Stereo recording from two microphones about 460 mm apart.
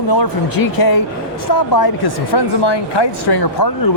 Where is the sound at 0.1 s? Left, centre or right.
Left.